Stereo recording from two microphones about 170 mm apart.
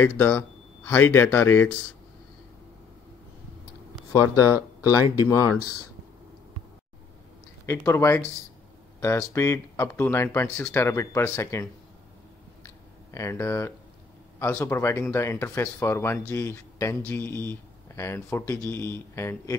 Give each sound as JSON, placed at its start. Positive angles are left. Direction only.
{"t": 0.0, "sound": "speech", "side_deg": 15}
{"t": 3.9, "sound": "a sound", "side_deg": 20}
{"t": 4.8, "sound": "speech", "side_deg": 20}
{"t": 7.6, "sound": "speech", "side_deg": 15}
{"t": 12.6, "sound": "a sound", "side_deg": 15}
{"t": 14.4, "sound": "speech", "side_deg": 15}